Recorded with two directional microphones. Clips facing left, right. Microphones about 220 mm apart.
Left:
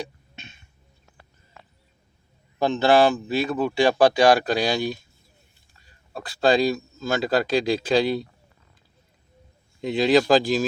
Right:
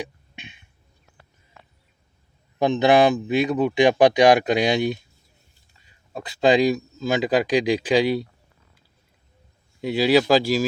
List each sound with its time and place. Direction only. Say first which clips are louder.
0.0 s a sound: right 1 dB; 15° right (ahead or behind)
2.6 s speech: right 1 dB; 20° right (ahead or behind)
6.1 s a man's voice: right 2 dB; 20° right (ahead or behind)
9.8 s a man's voice: right 1 dB; 10° right (ahead or behind)